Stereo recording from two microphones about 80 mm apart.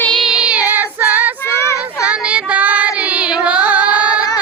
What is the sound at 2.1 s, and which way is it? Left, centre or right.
Carnatic music, centre.